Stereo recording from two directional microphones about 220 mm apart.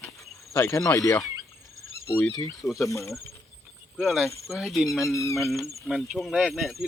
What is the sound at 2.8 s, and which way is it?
Speech, 15° left (ahead or behind).